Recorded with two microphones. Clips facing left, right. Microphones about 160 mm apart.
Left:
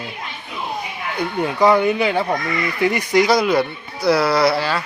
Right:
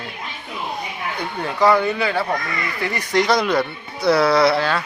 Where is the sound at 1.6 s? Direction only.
15° left (ahead or behind).